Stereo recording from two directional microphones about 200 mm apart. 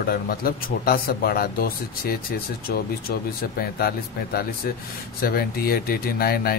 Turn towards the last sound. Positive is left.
turn(degrees=50)  # may be behind; listen again after turning